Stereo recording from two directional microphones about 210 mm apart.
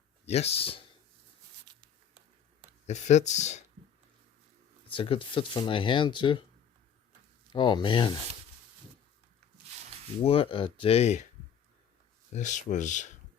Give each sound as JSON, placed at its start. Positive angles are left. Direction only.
{"t": 0.3, "sound": "speech", "side_deg": 30}
{"t": 1.7, "sound": "a sound", "side_deg": -20}
{"t": 2.8, "sound": "speech", "side_deg": 35}
{"t": 4.9, "sound": "speech", "side_deg": 25}
{"t": 7.5, "sound": "speech", "side_deg": 20}
{"t": 10.2, "sound": "speech", "side_deg": 25}
{"t": 12.3, "sound": "speech", "side_deg": 35}